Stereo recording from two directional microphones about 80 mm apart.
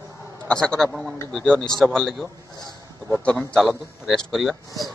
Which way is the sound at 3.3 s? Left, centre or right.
Centre.